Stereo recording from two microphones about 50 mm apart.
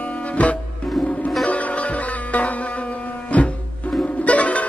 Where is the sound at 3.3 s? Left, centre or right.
Left.